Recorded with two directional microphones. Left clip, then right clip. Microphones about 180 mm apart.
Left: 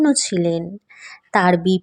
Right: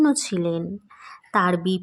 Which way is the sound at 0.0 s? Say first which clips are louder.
Left 3 dB; 15° left (ahead or behind).